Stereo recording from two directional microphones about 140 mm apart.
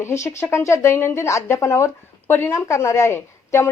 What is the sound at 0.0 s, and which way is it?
Speech, 20° left (ahead or behind).